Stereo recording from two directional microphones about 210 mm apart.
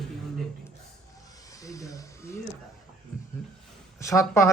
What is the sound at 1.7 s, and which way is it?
Speech, 15° left (ahead or behind).